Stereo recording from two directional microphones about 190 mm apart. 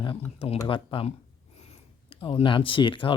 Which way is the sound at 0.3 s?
30° left (ahead or behind).